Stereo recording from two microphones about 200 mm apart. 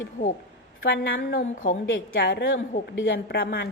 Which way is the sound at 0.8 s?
50° left (ahead or behind).